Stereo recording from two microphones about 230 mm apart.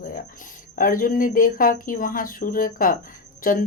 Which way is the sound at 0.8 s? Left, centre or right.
Left.